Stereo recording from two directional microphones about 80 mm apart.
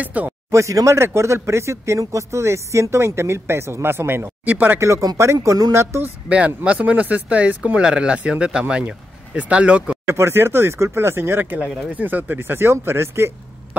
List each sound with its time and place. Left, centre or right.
0.0 s speech: centre
0.5 s speech: right
4.7 s speech: right
6.2 s speech: centre
10.0 s speech: right